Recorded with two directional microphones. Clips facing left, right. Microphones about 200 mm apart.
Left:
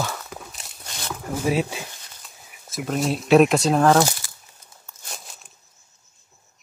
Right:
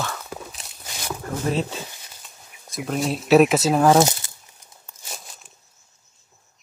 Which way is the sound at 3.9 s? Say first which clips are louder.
Right 2 dB; 20° right (ahead or behind).